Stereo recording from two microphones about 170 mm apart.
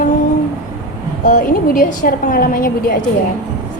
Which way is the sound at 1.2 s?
50° left (ahead or behind).